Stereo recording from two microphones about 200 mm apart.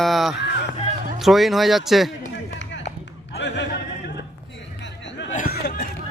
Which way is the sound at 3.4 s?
60° left (ahead or behind).